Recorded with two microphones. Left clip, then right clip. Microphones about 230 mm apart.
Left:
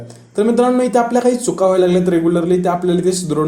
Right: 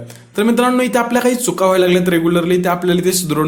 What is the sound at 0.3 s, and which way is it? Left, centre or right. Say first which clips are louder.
Speech: left 1 dB; right.